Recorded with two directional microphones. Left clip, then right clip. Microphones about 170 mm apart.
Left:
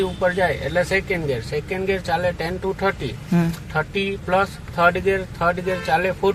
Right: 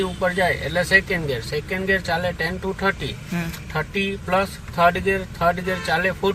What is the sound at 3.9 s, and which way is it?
Speech, centre (ahead or behind).